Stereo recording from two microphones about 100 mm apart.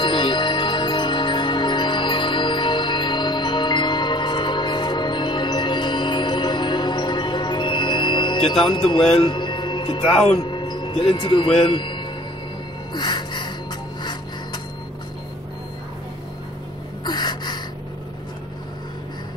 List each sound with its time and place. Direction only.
0.0 s music: 50° left (ahead or behind)
8.6 s speech: 60° left (ahead or behind)
10.5 s speech: 50° left (ahead or behind)
12.9 s a sound: 50° left (ahead or behind)
17.0 s gasp: 45° left (ahead or behind)